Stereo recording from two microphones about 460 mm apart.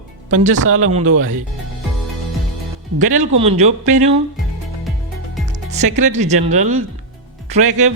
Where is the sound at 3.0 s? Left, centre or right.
Centre.